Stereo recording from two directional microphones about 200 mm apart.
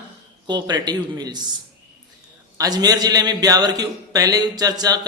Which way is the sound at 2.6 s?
20° right (ahead or behind).